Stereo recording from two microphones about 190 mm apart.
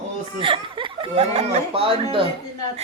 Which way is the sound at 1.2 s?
35° right (ahead or behind).